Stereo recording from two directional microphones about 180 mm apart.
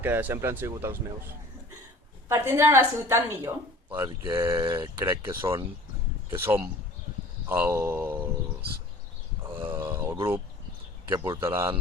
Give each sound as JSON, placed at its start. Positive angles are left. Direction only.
{"t": 0.0, "sound": "a woman's voice", "side_deg": -10}
{"t": 2.3, "sound": "a woman's voice", "side_deg": -15}
{"t": 9.7, "sound": "a sound", "side_deg": -15}
{"t": 11.1, "sound": "a woman's voice", "side_deg": -15}